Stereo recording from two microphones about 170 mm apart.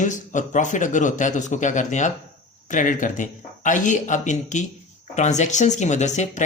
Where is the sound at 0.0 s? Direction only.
45° left (ahead or behind).